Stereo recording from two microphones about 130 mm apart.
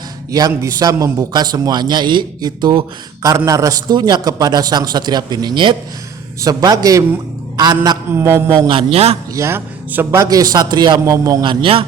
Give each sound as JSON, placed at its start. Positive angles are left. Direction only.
{"t": 0.3, "sound": "a man's voice", "side_deg": -30}
{"t": 8.1, "sound": "a man's voice", "side_deg": -20}
{"t": 8.6, "sound": "a man's voice", "side_deg": -45}
{"t": 9.3, "sound": "a man's voice", "side_deg": -20}
{"t": 11.4, "sound": "a man's voice", "side_deg": -45}